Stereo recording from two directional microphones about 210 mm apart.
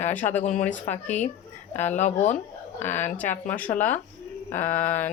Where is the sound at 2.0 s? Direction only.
35° left (ahead or behind).